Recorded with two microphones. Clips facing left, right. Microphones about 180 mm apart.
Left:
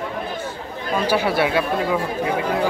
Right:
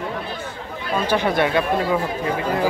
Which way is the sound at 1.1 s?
5° left (ahead or behind).